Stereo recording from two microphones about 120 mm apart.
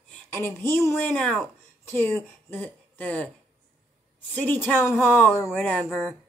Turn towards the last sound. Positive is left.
turn(degrees=5)  # may be behind; listen again after turning